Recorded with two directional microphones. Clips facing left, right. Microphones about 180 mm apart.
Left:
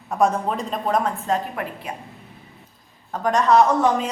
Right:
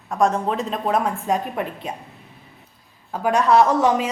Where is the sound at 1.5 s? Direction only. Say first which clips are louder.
Right 3 dB; 20° right (ahead or behind).